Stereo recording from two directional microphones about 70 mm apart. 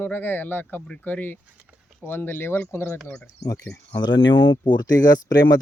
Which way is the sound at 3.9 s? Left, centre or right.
Left.